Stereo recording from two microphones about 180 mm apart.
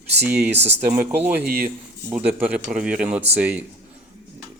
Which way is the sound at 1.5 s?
55° right (ahead or behind).